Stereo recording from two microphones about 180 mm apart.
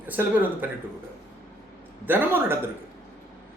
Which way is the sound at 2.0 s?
10° right (ahead or behind).